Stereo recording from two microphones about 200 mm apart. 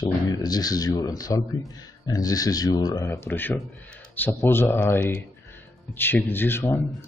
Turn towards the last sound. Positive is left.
turn(degrees=10)  # may be behind; listen again after turning